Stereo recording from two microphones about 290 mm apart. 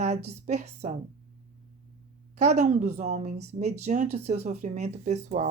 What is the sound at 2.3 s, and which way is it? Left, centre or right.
Speech, right.